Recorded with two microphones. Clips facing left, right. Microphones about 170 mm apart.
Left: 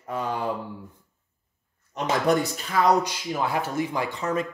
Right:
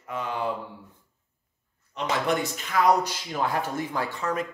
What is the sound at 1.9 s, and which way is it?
Speech, 35° left (ahead or behind).